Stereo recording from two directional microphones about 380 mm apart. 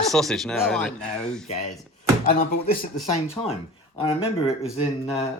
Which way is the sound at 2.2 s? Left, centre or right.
Left.